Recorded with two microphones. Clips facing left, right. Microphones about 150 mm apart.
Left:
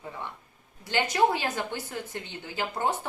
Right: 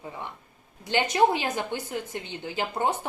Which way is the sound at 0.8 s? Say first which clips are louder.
Right 2 dB; 20° right (ahead or behind).